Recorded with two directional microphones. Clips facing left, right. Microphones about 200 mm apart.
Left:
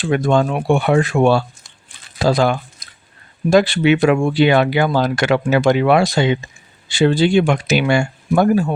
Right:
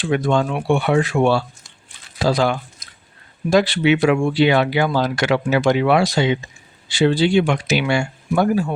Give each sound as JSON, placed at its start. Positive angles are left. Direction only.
{"t": 0.0, "sound": "speech", "side_deg": 50}